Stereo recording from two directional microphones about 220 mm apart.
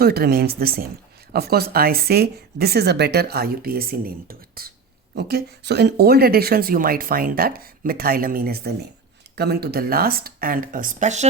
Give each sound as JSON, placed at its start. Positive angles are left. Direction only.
{"t": 0.0, "sound": "speech", "side_deg": -45}